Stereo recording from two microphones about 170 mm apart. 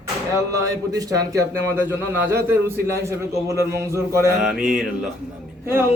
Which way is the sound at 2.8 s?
15° right (ahead or behind).